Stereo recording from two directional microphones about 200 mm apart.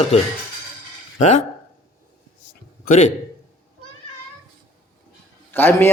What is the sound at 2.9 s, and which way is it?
Speech, 40° left (ahead or behind).